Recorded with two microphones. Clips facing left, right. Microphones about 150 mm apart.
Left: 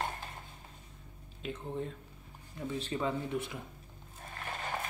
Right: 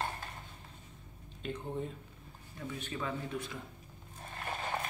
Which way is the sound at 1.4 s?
Centre (ahead or behind).